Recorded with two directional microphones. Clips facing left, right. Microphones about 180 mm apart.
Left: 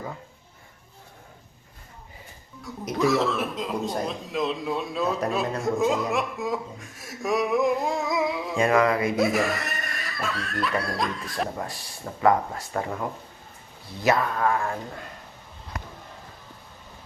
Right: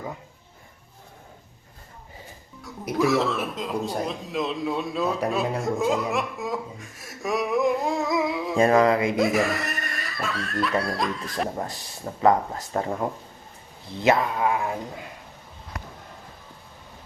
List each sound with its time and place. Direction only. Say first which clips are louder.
2.6 s speech: right 1 dB; centre (ahead or behind)
8.5 s a sound: right 3 dB; 35° right (ahead or behind)
9.1 s speech: right 1 dB; centre (ahead or behind)
11.5 s speech: right 2 dB; 20° right (ahead or behind)